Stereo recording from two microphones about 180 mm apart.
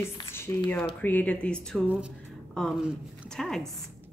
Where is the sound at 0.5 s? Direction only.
15° left (ahead or behind).